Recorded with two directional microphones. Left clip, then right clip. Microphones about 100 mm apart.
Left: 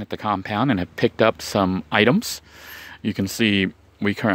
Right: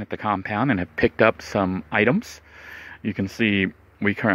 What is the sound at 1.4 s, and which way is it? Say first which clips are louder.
Speech: left 2 dB; 35° left (ahead or behind).